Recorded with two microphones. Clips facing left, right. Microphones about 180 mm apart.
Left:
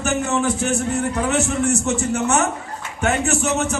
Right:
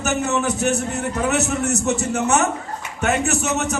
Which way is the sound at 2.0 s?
35° right (ahead or behind).